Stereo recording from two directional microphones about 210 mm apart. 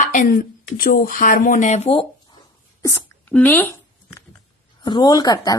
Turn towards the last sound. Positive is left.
turn(degrees=20)  # may be behind; listen again after turning